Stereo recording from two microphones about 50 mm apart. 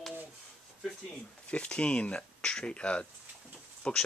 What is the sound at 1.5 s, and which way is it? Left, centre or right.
Speech, left.